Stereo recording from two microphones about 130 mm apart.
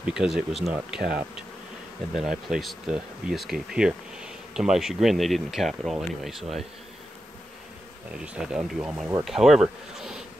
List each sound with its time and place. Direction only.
0.0 s speech: 5° right (ahead or behind)
8.2 s speech: 5° right (ahead or behind)